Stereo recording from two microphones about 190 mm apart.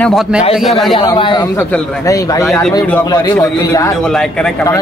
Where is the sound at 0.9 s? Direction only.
25° left (ahead or behind).